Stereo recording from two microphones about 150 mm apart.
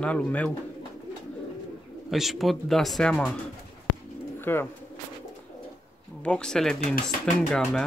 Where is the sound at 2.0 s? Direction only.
Centre (ahead or behind).